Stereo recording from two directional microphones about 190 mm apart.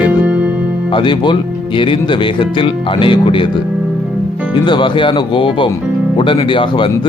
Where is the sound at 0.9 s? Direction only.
25° left (ahead or behind).